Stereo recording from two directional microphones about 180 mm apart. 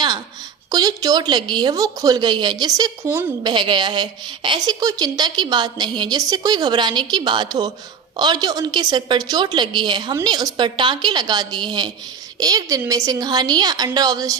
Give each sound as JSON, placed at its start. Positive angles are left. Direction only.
{"t": 0.7, "sound": "a woman's voice", "side_deg": -20}